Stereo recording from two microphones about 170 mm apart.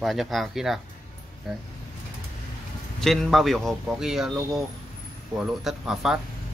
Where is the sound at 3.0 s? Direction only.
Centre (ahead or behind).